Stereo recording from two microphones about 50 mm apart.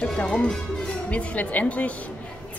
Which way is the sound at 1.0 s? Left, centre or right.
Left.